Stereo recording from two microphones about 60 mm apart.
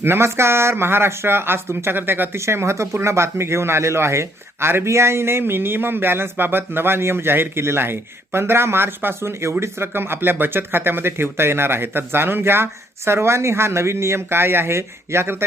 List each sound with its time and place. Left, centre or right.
0.0 s speech: right
2.4 s speech: right